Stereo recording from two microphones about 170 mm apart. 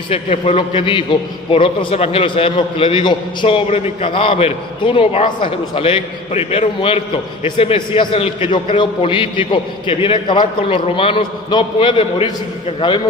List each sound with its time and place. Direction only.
0.1 s a man's voice: 35° left (ahead or behind)